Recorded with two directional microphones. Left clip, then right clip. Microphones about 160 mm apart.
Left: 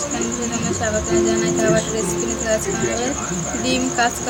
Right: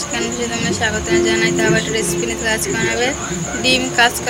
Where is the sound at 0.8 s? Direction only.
20° left (ahead or behind).